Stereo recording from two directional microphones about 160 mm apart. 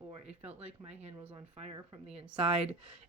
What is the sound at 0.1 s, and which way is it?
A woman's voice, 40° right (ahead or behind).